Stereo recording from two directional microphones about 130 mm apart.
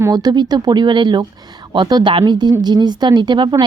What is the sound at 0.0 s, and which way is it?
Speech, 30° right (ahead or behind).